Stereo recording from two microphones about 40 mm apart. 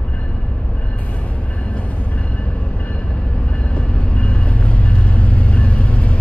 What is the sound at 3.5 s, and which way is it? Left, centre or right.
Vehicle, left.